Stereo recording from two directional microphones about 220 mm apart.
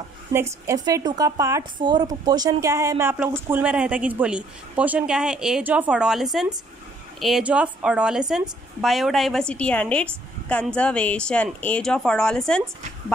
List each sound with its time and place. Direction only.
0.3 s a woman's voice: 10° right (ahead or behind)